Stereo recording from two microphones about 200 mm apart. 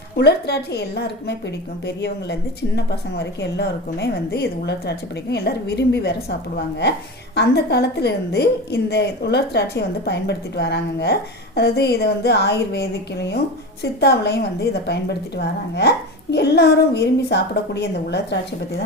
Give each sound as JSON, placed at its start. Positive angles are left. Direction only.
{"t": 0.2, "sound": "a woman's voice", "side_deg": 55}
{"t": 7.3, "sound": "a woman's voice", "side_deg": 55}